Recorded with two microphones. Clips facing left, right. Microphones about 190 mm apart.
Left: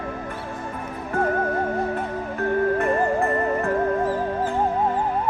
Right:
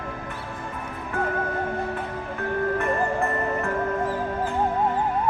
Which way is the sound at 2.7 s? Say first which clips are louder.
Left 3 dB; 35° left (ahead or behind).